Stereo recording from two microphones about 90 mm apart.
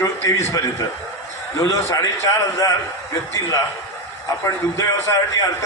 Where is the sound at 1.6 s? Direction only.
35° left (ahead or behind).